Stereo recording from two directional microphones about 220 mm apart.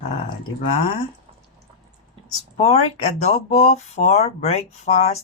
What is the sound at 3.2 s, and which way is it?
Speech, 30° left (ahead or behind).